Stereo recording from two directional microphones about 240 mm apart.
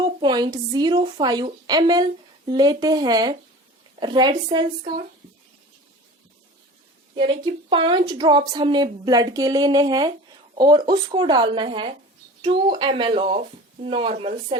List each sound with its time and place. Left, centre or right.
0.0 s speech: centre
7.2 s speech: right